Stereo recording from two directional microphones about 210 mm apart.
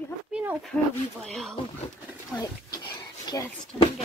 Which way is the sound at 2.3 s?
15° left (ahead or behind).